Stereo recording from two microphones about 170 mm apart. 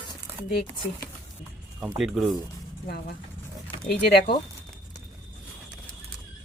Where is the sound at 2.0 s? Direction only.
Centre (ahead or behind).